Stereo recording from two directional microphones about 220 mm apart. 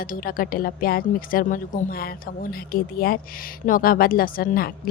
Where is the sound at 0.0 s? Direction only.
40° left (ahead or behind).